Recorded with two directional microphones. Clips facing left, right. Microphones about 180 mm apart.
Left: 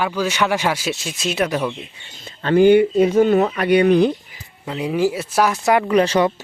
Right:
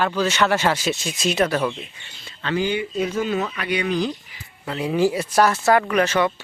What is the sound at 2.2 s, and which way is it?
Speech, 45° left (ahead or behind).